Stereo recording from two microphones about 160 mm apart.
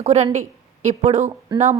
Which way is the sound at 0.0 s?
45° right (ahead or behind).